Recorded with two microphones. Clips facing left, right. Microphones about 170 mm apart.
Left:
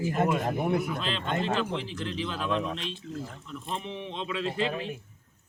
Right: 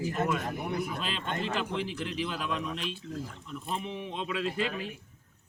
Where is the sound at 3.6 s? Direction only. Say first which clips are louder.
Even; 5° right (ahead or behind).